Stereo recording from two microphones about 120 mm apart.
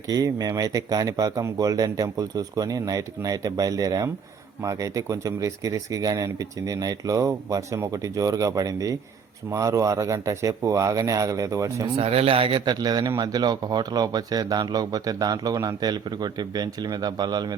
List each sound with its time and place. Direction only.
0.1 s speech: 30° right (ahead or behind)
11.9 s a man's voice: 55° right (ahead or behind); by 17.5 s 35° right (ahead or behind)